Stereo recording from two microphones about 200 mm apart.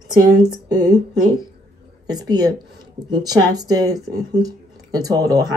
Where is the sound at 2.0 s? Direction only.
20° right (ahead or behind).